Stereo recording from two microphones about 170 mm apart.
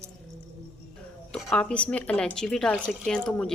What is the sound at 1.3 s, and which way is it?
Speech, centre (ahead or behind).